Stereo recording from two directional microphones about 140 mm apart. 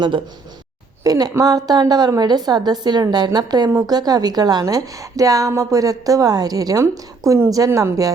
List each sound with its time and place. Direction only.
1.0 s a woman's voice: 25° right (ahead or behind)